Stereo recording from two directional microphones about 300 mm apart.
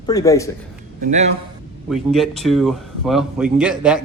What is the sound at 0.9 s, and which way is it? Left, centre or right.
Speech, right.